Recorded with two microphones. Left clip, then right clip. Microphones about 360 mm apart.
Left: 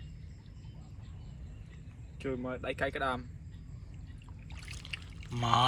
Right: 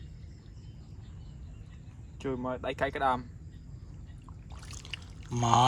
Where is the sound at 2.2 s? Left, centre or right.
Centre.